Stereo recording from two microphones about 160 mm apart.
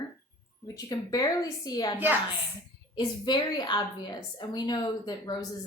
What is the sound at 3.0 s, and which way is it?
A woman's voice, 25° left (ahead or behind).